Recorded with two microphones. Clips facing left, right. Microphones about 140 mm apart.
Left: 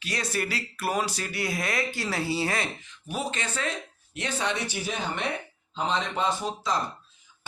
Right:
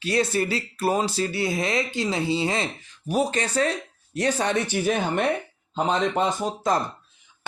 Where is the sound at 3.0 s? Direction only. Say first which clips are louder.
Right 8 dB; 40° right (ahead or behind).